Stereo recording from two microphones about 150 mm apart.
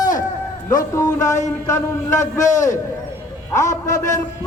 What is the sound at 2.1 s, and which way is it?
Speech, 55° left (ahead or behind).